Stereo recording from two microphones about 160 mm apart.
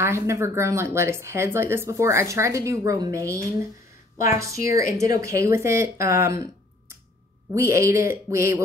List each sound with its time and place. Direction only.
0.0 s speech: 15° right (ahead or behind)
4.4 s a woman's voice: 20° right (ahead or behind)
7.5 s speech: 15° right (ahead or behind)